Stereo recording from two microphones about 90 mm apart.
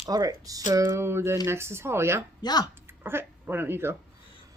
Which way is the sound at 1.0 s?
30° right (ahead or behind).